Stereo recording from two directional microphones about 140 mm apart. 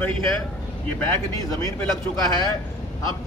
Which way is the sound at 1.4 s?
25° left (ahead or behind).